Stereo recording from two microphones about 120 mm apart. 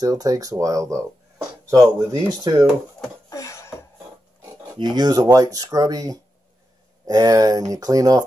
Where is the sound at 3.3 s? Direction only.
25° left (ahead or behind).